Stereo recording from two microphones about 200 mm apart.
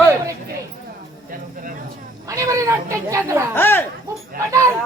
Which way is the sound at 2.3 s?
15° right (ahead or behind).